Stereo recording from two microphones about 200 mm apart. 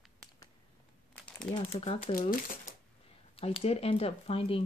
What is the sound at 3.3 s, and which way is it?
Speech, 30° left (ahead or behind).